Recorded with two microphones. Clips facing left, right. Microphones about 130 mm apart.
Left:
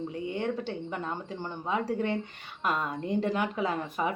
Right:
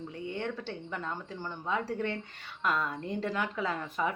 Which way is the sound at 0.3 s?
15° left (ahead or behind).